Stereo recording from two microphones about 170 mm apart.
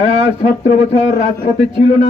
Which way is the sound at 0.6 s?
45° left (ahead or behind).